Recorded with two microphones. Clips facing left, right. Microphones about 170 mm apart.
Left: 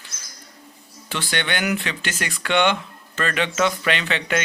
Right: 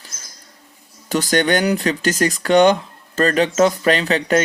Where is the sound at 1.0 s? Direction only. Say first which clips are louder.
Right 9 dB; 40° right (ahead or behind).